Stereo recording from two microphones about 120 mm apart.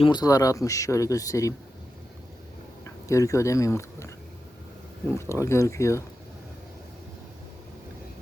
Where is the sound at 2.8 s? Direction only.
25° left (ahead or behind).